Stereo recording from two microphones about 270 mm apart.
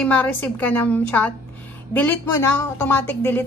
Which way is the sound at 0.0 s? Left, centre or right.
Centre.